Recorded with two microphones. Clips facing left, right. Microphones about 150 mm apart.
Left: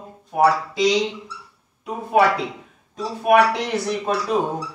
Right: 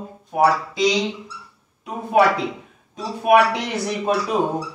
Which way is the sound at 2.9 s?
5° right (ahead or behind).